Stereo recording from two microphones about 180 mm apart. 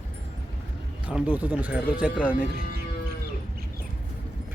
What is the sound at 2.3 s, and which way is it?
Speech, 50° left (ahead or behind).